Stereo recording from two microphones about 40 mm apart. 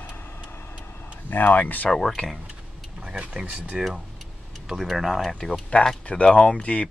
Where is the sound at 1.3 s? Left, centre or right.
Left.